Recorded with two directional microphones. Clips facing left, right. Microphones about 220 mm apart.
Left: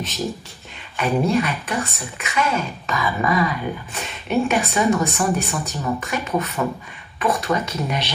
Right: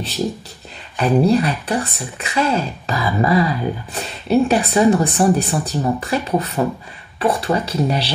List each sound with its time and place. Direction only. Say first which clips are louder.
0.9 s speech: right 4 dB; 35° right (ahead or behind)